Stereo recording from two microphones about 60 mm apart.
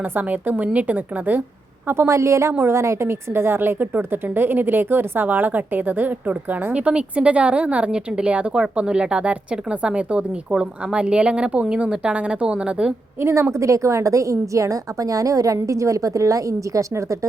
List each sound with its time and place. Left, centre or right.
0.0 s a woman's voice: right
1.9 s a woman's voice: right
6.7 s a woman's voice: centre
13.1 s a woman's voice: right